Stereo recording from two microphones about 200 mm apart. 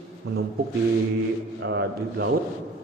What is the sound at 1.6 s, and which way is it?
Speech, 60° right (ahead or behind).